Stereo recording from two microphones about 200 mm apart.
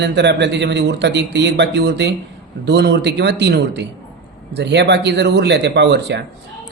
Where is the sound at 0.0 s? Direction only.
60° right (ahead or behind).